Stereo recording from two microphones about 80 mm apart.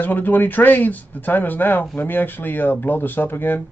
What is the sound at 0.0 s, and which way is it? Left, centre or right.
Speech, left.